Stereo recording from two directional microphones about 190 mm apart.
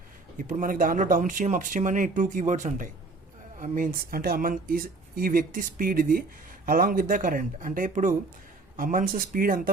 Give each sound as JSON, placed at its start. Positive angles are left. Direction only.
{"t": 0.3, "sound": "speech", "side_deg": -45}